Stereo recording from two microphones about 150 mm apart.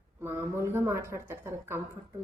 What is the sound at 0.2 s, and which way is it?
A woman's voice, 15° right (ahead or behind).